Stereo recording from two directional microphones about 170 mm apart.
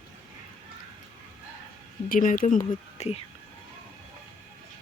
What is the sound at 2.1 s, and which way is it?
Speech, 55° left (ahead or behind).